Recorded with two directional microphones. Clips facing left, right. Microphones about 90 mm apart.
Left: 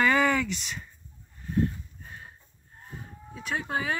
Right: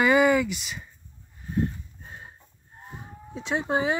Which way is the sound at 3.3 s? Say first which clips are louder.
Right 5 dB; 25° right (ahead or behind).